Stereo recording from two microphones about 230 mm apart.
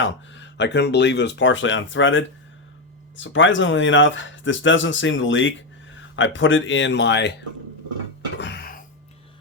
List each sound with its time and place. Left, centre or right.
0.0 s speech: left
8.4 s music: left